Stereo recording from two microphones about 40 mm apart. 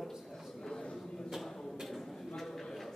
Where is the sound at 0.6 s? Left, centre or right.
Centre.